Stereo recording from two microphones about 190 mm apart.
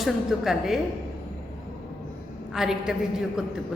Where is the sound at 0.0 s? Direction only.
Centre (ahead or behind).